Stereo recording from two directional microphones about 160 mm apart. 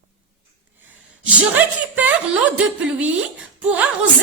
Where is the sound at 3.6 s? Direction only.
10° right (ahead or behind).